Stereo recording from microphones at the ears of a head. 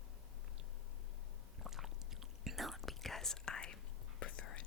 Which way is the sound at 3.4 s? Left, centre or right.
Left.